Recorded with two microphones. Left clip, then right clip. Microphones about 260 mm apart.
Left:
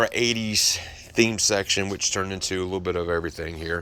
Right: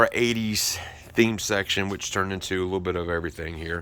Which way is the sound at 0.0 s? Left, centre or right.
Centre.